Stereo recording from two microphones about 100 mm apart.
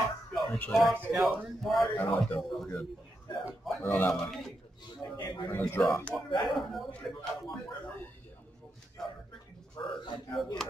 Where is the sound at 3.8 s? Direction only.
20° left (ahead or behind).